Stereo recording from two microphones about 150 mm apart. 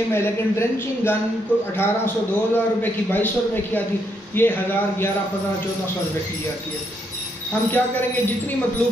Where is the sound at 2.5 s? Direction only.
15° left (ahead or behind).